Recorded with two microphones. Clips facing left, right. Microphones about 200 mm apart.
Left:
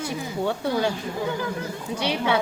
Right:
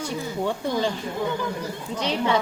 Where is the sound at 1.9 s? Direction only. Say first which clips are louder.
Left 1 dB; 10° left (ahead or behind).